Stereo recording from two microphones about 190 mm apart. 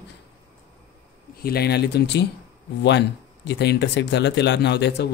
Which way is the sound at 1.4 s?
55° left (ahead or behind).